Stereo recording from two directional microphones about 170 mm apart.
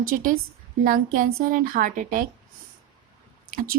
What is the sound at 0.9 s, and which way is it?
A woman's voice, 55° right (ahead or behind).